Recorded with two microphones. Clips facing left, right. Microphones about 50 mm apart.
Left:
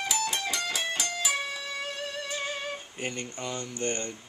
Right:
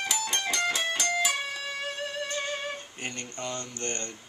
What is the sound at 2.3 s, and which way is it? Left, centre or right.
Music, centre.